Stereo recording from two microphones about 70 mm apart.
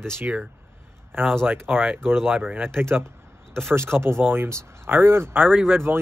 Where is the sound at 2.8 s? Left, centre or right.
Right.